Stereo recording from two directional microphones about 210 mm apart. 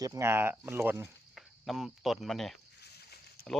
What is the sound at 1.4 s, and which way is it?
Speech, centre (ahead or behind).